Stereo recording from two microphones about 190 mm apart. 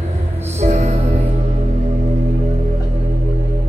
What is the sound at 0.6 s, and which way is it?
Music, 35° right (ahead or behind).